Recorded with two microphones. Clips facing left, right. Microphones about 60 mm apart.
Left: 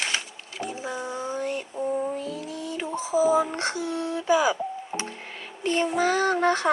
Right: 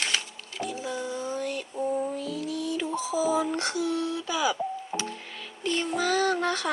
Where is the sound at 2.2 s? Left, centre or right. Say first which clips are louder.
Right 1 dB; left.